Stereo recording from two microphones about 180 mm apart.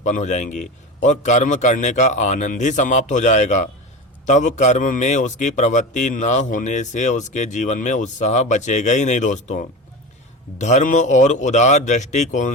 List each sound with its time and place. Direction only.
0.0 s a man's voice: 40° left (ahead or behind)